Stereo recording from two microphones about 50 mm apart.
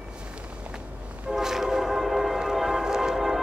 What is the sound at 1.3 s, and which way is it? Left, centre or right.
Train, centre.